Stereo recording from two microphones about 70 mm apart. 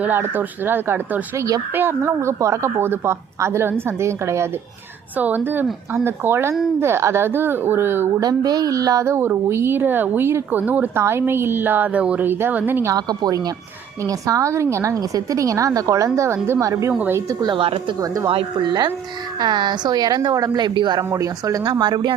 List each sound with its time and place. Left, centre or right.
0.0 s a woman's voice: right
2.0 s a woman's voice: right
5.1 s a woman's voice: right
8.2 s speech: right
9.0 s a woman's voice: right
10.6 s a woman's voice: right
10.9 s a woman's voice: right; by 12.2 s centre
12.2 s a woman's voice: right
12.9 s speech: right
14.0 s a woman's voice: right
18.6 s speech: right
21.0 s speech: right